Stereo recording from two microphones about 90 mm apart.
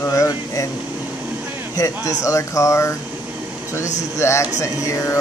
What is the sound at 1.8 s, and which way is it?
Speech, 35° left (ahead or behind).